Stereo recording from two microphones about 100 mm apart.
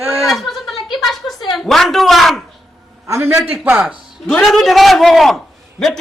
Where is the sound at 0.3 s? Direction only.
Centre (ahead or behind).